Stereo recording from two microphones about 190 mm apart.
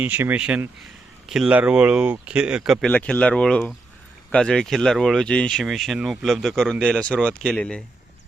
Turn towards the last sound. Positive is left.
turn(degrees=5)  # may be behind; listen again after turning